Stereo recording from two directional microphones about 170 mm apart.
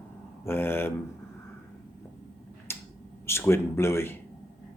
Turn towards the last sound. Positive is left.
turn(degrees=15)  # may be behind; listen again after turning